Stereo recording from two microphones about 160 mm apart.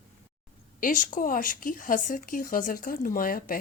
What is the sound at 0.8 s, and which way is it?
A woman's voice, 55° left (ahead or behind).